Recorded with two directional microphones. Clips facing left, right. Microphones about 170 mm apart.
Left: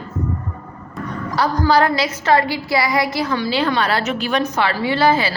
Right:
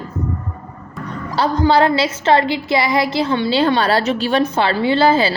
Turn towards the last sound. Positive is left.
turn(degrees=-30)  # may be behind; listen again after turning